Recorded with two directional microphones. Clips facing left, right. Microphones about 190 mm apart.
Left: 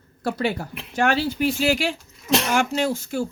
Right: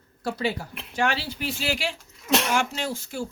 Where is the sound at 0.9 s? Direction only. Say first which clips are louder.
Left 5 dB; 45° left (ahead or behind).